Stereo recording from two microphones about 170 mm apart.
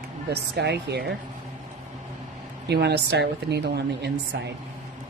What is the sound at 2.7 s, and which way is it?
Speech, 75° right (ahead or behind).